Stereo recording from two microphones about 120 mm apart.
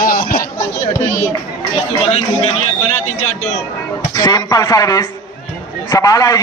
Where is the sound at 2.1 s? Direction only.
65° left (ahead or behind).